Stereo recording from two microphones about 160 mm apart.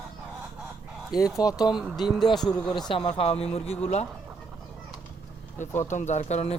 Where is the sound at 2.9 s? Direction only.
35° left (ahead or behind).